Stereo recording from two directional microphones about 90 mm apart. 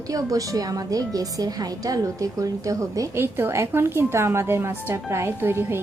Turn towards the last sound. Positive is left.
turn(degrees=-25)  # may be behind; listen again after turning